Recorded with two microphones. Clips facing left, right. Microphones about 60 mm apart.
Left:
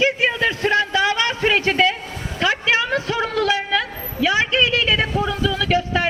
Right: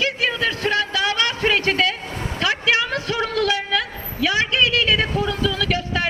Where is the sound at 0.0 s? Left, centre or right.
Left.